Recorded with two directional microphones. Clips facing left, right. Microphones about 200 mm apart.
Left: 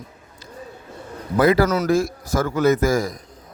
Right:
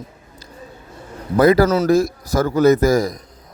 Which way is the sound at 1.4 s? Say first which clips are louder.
Right 4 dB; 40° right (ahead or behind).